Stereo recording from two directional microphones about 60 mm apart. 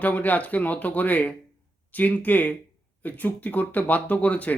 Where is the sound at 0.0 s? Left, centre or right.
Left.